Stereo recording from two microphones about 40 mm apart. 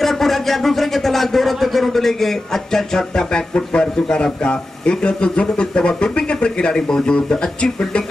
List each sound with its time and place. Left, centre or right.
0.0 s speech: centre; by 8.0 s left